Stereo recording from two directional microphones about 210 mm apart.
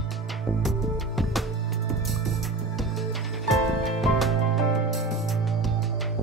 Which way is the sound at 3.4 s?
Centre (ahead or behind).